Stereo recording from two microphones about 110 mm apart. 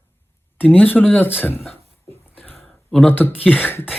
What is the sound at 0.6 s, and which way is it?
Speech, 15° left (ahead or behind).